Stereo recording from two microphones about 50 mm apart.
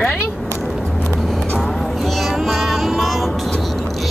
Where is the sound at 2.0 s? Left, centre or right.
Centre.